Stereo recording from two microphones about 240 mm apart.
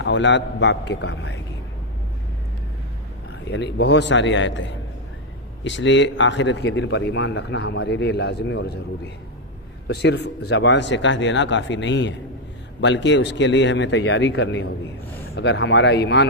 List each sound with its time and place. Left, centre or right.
0.0 s a man's voice: left
3.4 s a man's voice: left
9.8 s a man's voice: left